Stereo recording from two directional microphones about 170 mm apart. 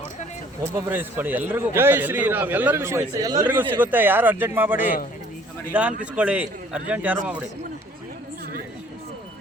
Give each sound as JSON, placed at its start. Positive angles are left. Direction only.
{"t": 0.9, "sound": "a man's voice", "side_deg": -10}